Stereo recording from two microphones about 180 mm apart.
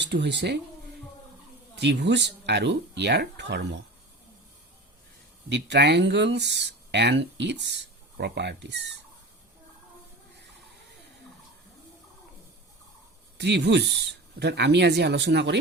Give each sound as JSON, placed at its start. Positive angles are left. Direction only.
{"t": 0.1, "sound": "speech", "side_deg": -75}
{"t": 1.8, "sound": "speech", "side_deg": -75}
{"t": 5.5, "sound": "speech", "side_deg": -75}
{"t": 13.4, "sound": "speech", "side_deg": -70}